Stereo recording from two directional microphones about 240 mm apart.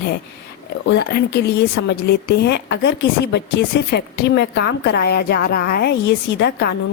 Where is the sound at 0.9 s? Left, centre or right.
Left.